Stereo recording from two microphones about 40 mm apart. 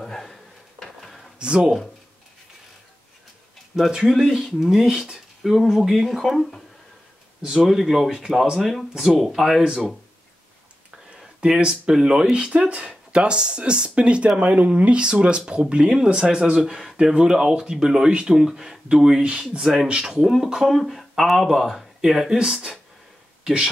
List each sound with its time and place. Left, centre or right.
0.0 s a sound: centre
1.4 s speech: right
3.7 s speech: centre
5.7 s speech: centre
7.4 s speech: centre
11.4 s speech: right
20.6 s speech: centre; by 22.8 s right